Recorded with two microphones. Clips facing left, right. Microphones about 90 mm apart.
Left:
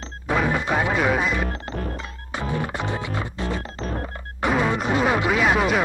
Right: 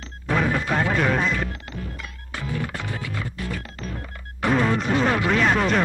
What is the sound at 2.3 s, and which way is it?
Music, 20° left (ahead or behind).